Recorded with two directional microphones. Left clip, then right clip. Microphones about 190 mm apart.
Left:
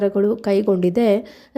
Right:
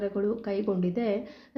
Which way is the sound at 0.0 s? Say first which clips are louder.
Left 11 dB; 50° left (ahead or behind).